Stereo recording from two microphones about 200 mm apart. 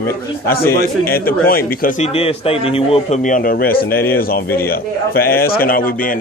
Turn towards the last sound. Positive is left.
turn(degrees=45)  # may be behind; listen again after turning